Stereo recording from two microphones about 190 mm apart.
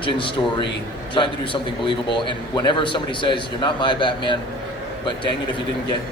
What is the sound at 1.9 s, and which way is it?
A man's voice, 25° left (ahead or behind).